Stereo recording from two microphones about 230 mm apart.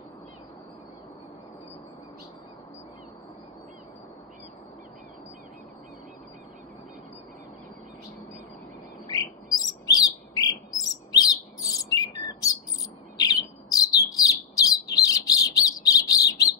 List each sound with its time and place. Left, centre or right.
9.0 s chirp: centre
13.2 s bird: centre